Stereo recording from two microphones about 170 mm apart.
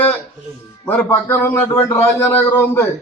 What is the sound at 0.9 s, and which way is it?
A man's voice, 10° left (ahead or behind).